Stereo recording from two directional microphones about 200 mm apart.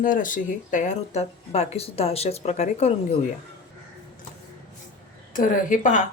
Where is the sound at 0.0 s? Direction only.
40° left (ahead or behind).